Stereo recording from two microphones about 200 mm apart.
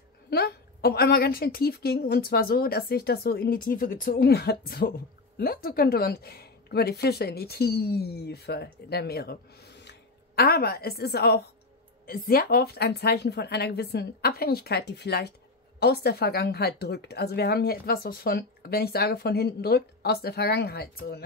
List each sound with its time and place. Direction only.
0.3 s a woman's voice: 50° left (ahead or behind)